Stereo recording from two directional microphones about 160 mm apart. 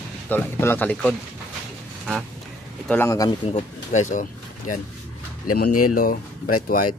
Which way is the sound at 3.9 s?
50° left (ahead or behind).